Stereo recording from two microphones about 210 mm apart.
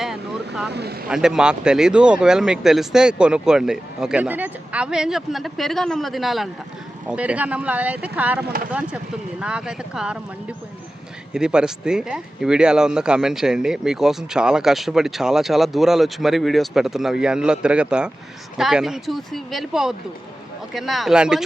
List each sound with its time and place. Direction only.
0.0 s vehicle: centre (ahead or behind)
0.7 s speech: 50° right (ahead or behind)
1.1 s speech: 5° right (ahead or behind)
11.3 s speech: 5° right (ahead or behind)